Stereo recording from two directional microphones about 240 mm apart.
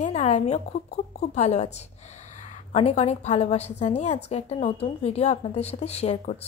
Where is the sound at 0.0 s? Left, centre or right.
Left.